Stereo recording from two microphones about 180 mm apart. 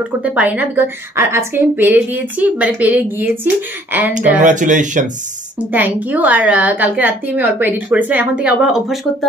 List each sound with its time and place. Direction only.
0.2 s a woman's voice: 10° right (ahead or behind)
4.4 s speech: 45° right (ahead or behind)
5.6 s a woman's voice: 10° right (ahead or behind)